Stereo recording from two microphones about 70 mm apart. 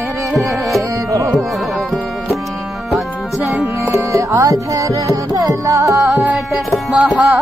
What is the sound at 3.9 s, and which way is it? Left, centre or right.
Music, right.